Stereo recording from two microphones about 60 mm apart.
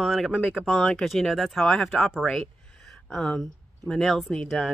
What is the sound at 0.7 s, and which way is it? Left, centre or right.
Speech, centre.